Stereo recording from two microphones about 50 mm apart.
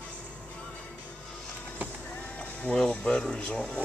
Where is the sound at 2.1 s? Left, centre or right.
Left.